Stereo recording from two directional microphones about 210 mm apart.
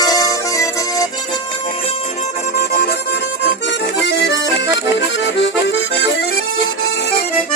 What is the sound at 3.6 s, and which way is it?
Accordion, 55° left (ahead or behind).